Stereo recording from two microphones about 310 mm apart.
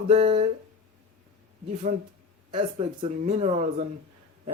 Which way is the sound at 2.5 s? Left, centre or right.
Centre.